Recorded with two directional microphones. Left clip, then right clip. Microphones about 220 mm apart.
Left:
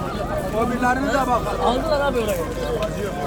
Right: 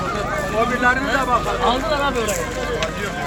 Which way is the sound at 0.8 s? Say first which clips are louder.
Right 1 dB; 50° left (ahead or behind).